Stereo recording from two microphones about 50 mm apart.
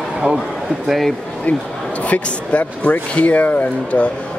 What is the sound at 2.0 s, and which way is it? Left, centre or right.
Speech, left.